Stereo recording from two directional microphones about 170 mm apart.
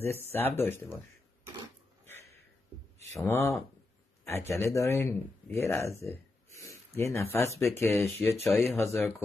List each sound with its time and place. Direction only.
0.0 s speech: 15° left (ahead or behind)
2.0 s sniff: 15° left (ahead or behind)
3.3 s a man's voice: 15° left (ahead or behind)